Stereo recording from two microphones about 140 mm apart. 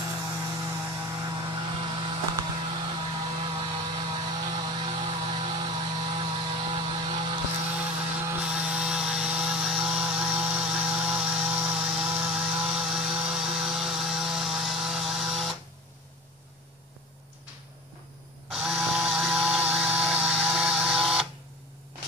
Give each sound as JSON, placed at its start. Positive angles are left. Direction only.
{"t": 0.3, "sound": "vehicle", "side_deg": -20}
{"t": 1.4, "sound": "vehicle", "side_deg": -35}
{"t": 7.8, "sound": "chainsaw", "side_deg": -10}
{"t": 18.5, "sound": "a sound", "side_deg": 0}